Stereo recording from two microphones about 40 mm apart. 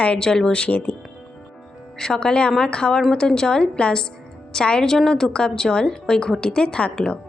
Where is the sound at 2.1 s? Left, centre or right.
Left.